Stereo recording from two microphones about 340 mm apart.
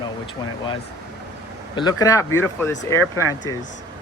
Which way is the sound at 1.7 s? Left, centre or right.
Centre.